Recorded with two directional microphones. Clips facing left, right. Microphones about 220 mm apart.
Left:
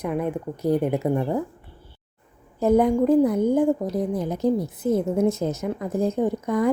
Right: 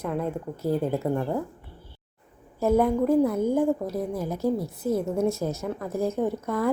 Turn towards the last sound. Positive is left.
turn(degrees=15)  # may be behind; listen again after turning